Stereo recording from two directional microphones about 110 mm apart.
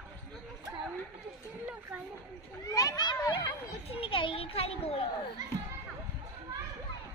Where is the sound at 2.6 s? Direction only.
35° left (ahead or behind).